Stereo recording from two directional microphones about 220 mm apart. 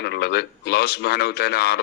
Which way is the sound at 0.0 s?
50° left (ahead or behind).